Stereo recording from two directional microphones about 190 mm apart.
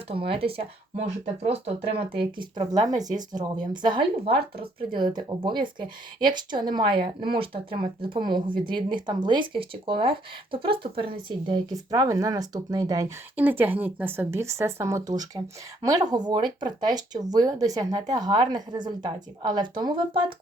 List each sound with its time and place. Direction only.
0.1 s speech: 30° right (ahead or behind)